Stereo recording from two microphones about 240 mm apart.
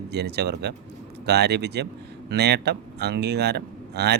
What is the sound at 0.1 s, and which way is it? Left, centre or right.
Speech, right.